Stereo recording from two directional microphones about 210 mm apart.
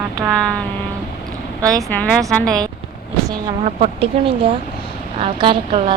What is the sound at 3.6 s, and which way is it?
Speech, 30° right (ahead or behind).